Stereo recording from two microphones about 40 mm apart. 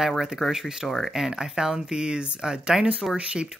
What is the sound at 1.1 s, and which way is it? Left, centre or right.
Speech, centre.